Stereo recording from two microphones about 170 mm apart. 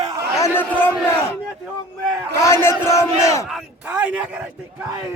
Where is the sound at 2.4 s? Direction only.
15° left (ahead or behind).